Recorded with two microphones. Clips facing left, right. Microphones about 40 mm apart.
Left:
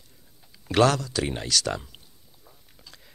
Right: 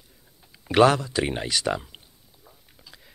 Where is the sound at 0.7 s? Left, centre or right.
Centre.